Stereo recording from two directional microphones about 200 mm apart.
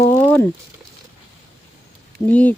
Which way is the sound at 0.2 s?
5° left (ahead or behind).